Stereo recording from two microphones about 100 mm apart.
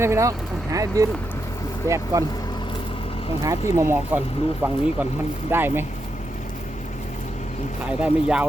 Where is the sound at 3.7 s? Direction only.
25° right (ahead or behind).